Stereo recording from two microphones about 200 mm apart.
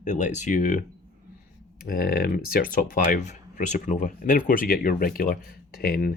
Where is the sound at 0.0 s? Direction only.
40° left (ahead or behind).